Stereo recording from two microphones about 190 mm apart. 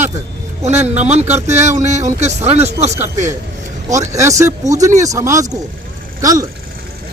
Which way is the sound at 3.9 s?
15° right (ahead or behind).